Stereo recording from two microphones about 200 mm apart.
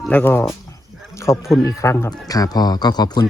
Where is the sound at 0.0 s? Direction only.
10° left (ahead or behind).